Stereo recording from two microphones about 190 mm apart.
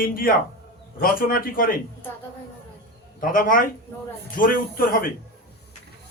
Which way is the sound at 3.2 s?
45° left (ahead or behind).